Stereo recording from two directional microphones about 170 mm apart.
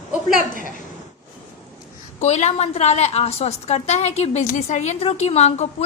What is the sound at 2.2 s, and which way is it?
A woman's voice, 40° left (ahead or behind).